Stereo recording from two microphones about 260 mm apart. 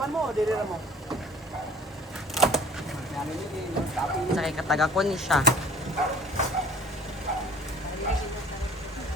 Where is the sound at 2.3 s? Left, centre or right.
Centre.